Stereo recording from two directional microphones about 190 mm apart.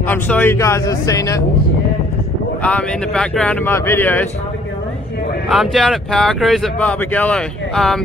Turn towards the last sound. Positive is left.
turn(degrees=0)  # may be behind; listen again after turning